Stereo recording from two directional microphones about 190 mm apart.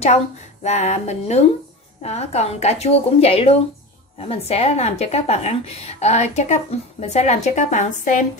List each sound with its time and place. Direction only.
0.7 s speech: 35° left (ahead or behind)